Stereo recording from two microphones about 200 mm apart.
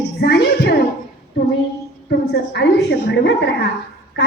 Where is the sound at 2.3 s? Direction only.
60° left (ahead or behind).